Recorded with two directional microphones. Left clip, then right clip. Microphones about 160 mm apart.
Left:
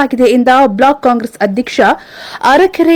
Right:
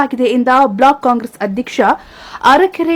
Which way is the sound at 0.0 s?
20° left (ahead or behind).